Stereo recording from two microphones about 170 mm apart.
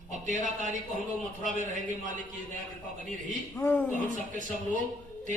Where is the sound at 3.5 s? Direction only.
10° left (ahead or behind).